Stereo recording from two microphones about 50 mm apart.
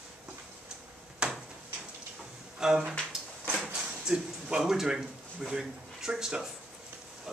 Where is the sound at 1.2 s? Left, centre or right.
Centre.